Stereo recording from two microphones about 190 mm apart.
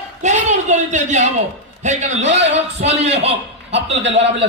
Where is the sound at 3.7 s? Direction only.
70° right (ahead or behind).